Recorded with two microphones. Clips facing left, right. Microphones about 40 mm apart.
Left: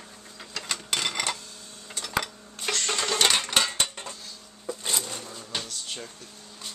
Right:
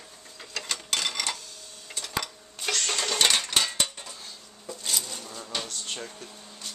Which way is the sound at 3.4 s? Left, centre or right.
Centre.